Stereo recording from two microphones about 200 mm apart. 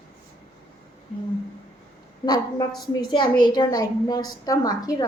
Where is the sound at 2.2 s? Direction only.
20° left (ahead or behind).